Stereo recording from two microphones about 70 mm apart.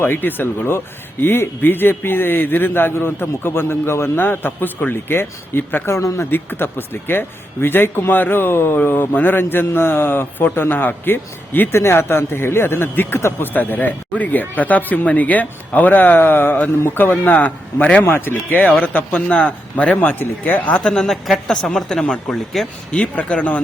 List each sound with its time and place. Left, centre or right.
0.0 s speech: left
6.3 s speech: left
18.0 s speech: left
20.8 s a man's voice: centre
22.9 s speech: centre